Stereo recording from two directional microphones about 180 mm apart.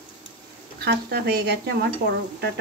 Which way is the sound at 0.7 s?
60° right (ahead or behind).